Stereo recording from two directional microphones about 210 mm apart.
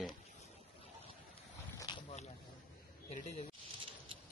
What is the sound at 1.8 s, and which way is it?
Boat, 25° left (ahead or behind).